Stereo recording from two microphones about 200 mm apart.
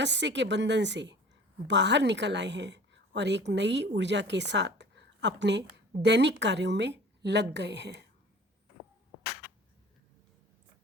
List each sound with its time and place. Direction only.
0.0 s a woman's voice: 60° right (ahead or behind)